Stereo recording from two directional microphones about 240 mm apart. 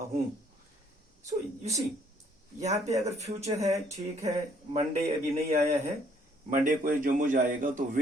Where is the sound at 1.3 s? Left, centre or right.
Right.